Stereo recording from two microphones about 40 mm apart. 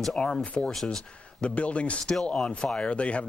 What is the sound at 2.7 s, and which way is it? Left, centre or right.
Speech, left.